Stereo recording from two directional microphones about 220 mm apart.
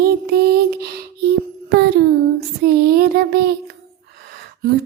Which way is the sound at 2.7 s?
45° right (ahead or behind).